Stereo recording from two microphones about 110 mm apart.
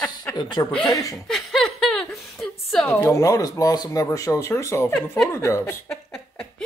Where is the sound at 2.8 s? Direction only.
20° left (ahead or behind).